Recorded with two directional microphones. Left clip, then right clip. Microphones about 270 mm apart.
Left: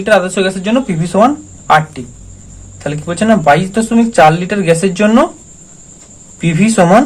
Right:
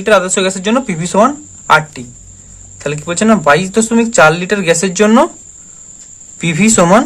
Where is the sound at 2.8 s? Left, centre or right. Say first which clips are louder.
Right 1 dB; right.